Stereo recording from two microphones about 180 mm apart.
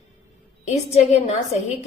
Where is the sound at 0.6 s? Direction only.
35° left (ahead or behind).